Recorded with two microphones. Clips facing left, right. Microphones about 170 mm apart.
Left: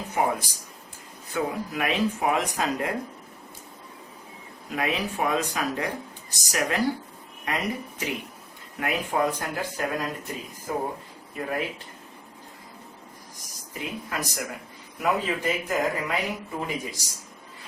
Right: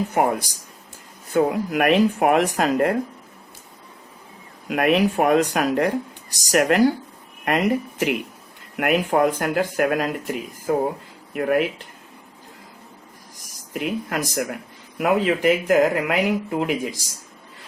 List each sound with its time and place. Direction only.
0.1 s speech: 65° right (ahead or behind)
1.5 s speech: 65° right (ahead or behind)
4.7 s speech: 65° right (ahead or behind)
13.7 s speech: 70° right (ahead or behind)